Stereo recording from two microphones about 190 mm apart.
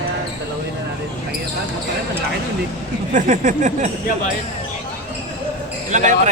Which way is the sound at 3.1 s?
40° right (ahead or behind).